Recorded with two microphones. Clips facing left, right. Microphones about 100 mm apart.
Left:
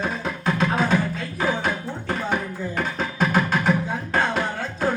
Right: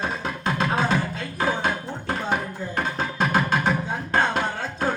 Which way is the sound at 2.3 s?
20° right (ahead or behind).